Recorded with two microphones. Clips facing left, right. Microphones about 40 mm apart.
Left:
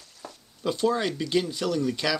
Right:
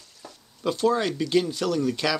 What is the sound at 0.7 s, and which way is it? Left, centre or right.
Speech, centre.